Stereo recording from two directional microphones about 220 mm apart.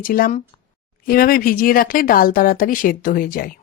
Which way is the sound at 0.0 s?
40° left (ahead or behind).